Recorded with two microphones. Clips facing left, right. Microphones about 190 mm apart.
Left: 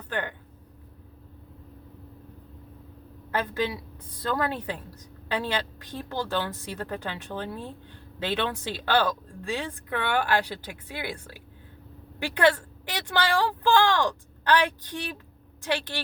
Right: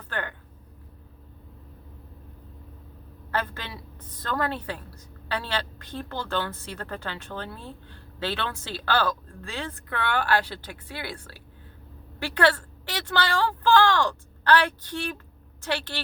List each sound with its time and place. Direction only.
0.1 s speech: 20° left (ahead or behind)
3.3 s a woman's voice: 15° left (ahead or behind)